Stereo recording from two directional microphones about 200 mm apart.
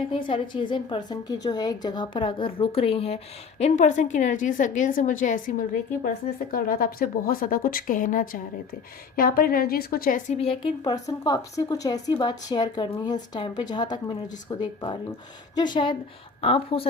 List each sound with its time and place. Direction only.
0.3 s a woman's voice: 25° left (ahead or behind)